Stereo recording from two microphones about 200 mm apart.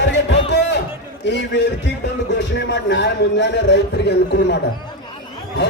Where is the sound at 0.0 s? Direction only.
65° left (ahead or behind).